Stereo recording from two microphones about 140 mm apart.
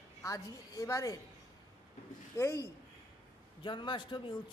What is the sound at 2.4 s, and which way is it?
Speech, 20° left (ahead or behind).